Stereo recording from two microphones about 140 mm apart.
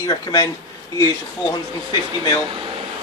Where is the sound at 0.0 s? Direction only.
20° left (ahead or behind).